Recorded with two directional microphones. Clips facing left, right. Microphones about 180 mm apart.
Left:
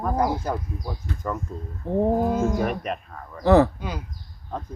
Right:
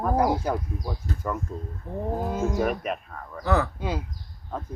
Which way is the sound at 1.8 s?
30° left (ahead or behind).